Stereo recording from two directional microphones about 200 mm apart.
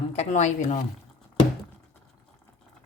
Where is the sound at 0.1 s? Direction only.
35° left (ahead or behind).